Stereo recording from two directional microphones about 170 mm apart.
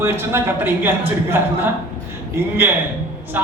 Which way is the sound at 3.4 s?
10° right (ahead or behind).